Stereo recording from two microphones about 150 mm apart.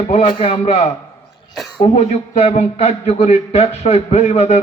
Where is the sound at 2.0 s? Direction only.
45° left (ahead or behind).